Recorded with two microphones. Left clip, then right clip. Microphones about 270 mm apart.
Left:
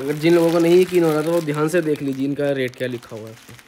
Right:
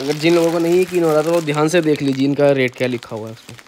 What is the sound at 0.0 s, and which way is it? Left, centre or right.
Speech, right.